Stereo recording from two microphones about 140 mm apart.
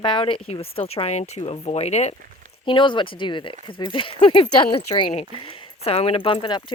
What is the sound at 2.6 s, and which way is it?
Speech, 35° left (ahead or behind).